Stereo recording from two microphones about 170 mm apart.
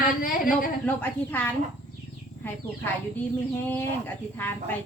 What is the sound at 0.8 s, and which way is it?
Speech, 10° left (ahead or behind).